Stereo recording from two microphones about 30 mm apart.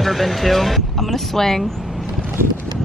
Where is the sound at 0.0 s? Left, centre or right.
Centre.